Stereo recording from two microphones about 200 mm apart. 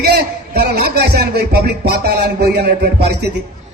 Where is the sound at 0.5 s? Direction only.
50° right (ahead or behind).